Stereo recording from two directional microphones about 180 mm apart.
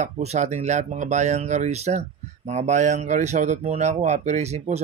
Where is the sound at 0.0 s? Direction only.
40° right (ahead or behind).